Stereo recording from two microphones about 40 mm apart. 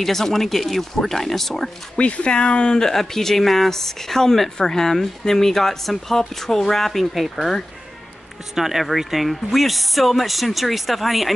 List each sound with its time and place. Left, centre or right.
0.0 s speech: centre
2.0 s speech: left; by 7.2 s centre
8.5 s speech: centre